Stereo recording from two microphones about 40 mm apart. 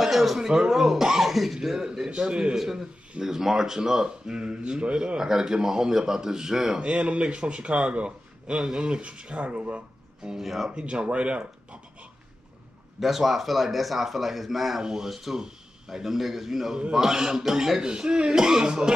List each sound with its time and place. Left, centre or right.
0.0 s speech: centre
2.0 s a man's voice: right
2.5 s speech: centre
6.8 s a man's voice: right
10.3 s a man's voice: centre
10.7 s speech: right
13.0 s a man's voice: centre
14.8 s speech: centre
15.0 s a man's voice: centre